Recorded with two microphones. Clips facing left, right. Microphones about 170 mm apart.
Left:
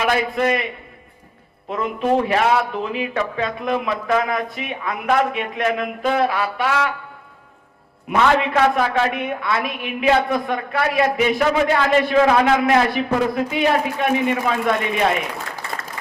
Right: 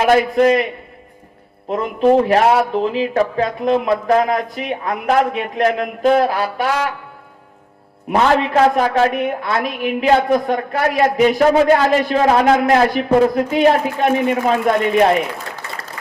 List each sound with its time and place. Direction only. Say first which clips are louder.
0.0 s a man's voice: right 7 dB; 40° right (ahead or behind)
1.7 s a man's voice: right 6 dB; 35° right (ahead or behind)
8.1 s a man's voice: right 3 dB; 35° right (ahead or behind)